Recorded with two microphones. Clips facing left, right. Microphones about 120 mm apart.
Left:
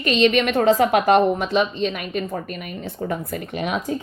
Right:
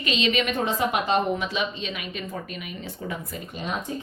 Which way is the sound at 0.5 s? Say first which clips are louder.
Left 8 dB; 70° left (ahead or behind).